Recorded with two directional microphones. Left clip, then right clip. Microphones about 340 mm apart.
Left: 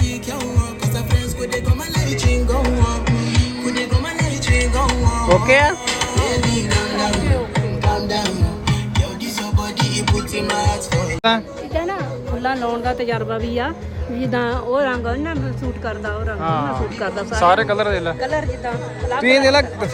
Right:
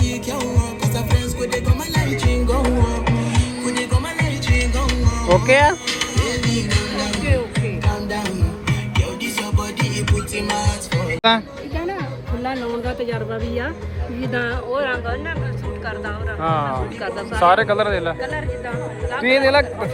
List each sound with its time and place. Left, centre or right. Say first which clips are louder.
1.4 s music: even; centre
2.5 s music: right 2 dB; right; by 3.8 s centre
4.4 s music: left 6 dB; left
5.5 s speech: right 1 dB; centre
6.1 s music: left 3 dB; left
9.9 s music: left 3 dB; left; by 11.9 s centre
13.0 s a man's voice: left 3 dB; centre
14.3 s speech: left 3 dB; left
16.4 s a man's voice: right 1 dB; centre